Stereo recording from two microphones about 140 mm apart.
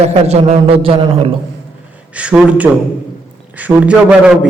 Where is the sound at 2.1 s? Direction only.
10° right (ahead or behind).